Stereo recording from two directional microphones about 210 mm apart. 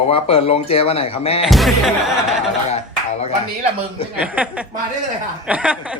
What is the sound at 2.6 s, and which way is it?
Speech, 30° left (ahead or behind).